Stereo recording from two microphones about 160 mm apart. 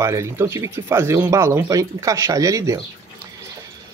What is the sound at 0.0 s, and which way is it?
Speech, 15° right (ahead or behind).